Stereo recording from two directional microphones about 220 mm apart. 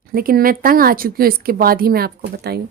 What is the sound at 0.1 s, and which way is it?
A woman's voice, 40° right (ahead or behind).